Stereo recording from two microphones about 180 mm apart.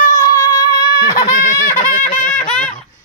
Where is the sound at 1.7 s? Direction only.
45° left (ahead or behind).